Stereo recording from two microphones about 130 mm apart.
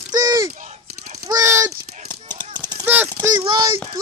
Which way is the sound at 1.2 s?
25° right (ahead or behind).